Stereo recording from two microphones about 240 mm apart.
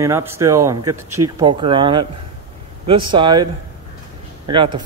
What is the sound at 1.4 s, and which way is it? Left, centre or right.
Speech, right.